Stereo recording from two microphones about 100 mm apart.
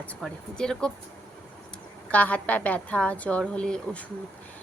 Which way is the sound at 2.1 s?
15° left (ahead or behind).